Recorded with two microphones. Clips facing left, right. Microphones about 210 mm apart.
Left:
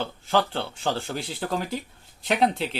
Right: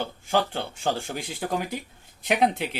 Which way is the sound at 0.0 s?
15° right (ahead or behind).